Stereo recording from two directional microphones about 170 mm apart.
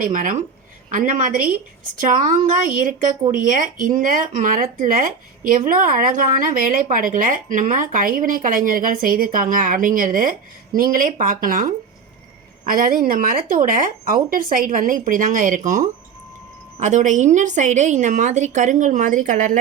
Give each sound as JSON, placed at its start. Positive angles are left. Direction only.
{"t": 0.0, "sound": "speech", "side_deg": -50}
{"t": 16.8, "sound": "speech", "side_deg": -45}